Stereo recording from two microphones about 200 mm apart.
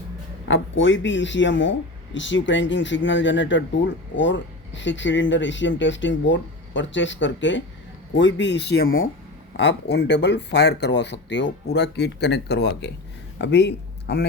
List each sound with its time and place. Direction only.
0.4 s speech: 70° left (ahead or behind); by 9.0 s 45° left (ahead or behind)
9.6 s speech: 60° left (ahead or behind)